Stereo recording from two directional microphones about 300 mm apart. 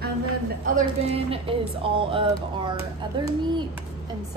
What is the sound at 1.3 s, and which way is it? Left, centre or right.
Speech, centre.